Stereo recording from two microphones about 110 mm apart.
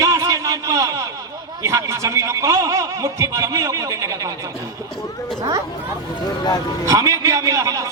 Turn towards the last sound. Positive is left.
turn(degrees=-30)  # may be behind; listen again after turning